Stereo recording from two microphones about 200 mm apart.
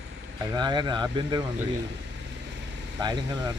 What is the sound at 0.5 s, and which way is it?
Speech, 20° right (ahead or behind).